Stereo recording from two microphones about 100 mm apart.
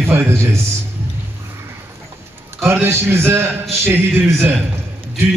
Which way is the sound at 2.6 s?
20° right (ahead or behind).